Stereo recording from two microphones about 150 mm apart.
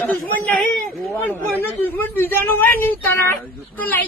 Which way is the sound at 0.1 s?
10° left (ahead or behind).